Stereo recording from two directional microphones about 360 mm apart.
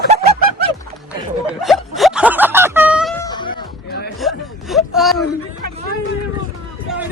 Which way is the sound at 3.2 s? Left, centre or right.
Centre.